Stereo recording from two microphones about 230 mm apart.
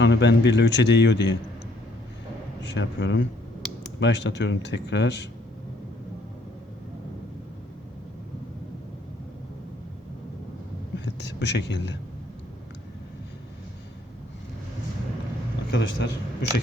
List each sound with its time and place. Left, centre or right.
0.0 s a man's voice: left
2.6 s a man's voice: left
10.9 s whispering: left
15.7 s a man's voice: left